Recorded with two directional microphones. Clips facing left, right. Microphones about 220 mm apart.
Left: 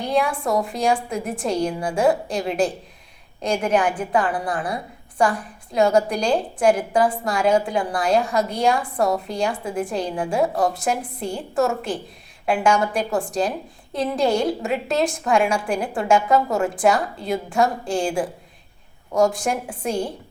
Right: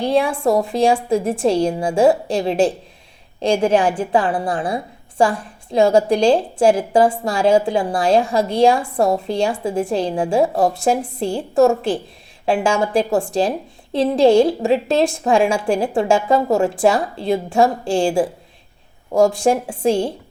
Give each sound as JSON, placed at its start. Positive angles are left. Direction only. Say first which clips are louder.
{"t": 0.0, "sound": "a woman's voice", "louder": "right 5 dB", "side_deg": -30}